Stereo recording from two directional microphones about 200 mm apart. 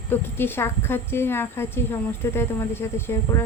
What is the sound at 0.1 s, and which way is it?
Speech, 10° left (ahead or behind).